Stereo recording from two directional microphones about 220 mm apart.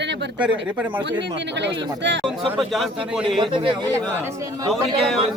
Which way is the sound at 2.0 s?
55° right (ahead or behind).